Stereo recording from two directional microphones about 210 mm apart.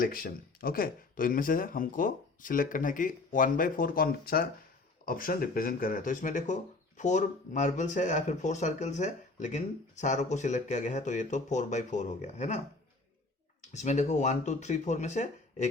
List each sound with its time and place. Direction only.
0.0 s speech: 45° left (ahead or behind)
13.6 s speech: 35° left (ahead or behind)